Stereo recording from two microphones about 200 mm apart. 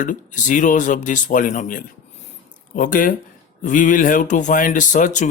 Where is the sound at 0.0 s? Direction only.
40° left (ahead or behind).